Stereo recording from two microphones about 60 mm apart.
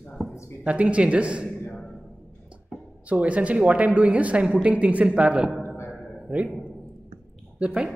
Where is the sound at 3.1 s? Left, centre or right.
Right.